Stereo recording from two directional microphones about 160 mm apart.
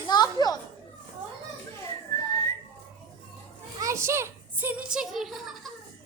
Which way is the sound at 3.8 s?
20° right (ahead or behind).